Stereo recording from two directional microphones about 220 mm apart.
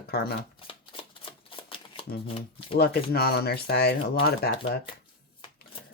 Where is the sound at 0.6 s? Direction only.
25° left (ahead or behind).